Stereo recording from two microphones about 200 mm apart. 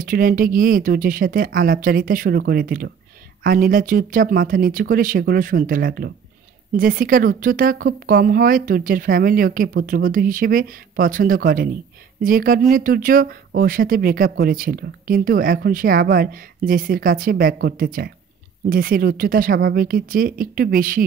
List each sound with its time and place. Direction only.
0.0 s speech: 45° right (ahead or behind)